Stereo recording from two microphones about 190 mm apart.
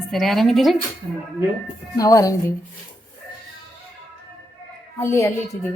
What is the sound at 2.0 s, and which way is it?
Speech, 15° left (ahead or behind).